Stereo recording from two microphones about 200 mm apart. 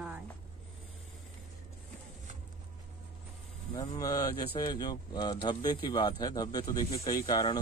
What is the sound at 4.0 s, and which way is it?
Speech, 15° left (ahead or behind).